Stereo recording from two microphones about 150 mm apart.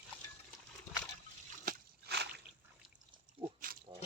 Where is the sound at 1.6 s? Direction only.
80° right.